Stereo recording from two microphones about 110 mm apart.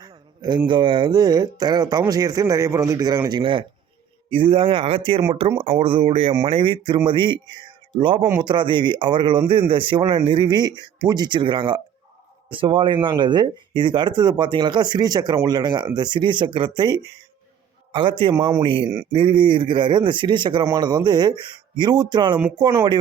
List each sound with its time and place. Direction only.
0.7 s speech: 45° right (ahead or behind)
3.2 s speech: 45° right (ahead or behind)